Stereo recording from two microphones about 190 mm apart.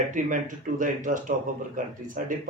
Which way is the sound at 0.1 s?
45° right (ahead or behind).